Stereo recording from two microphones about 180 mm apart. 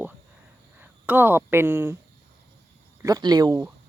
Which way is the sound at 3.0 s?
20° right (ahead or behind).